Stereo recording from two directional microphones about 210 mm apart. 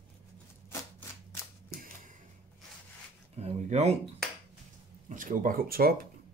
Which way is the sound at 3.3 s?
30° right (ahead or behind).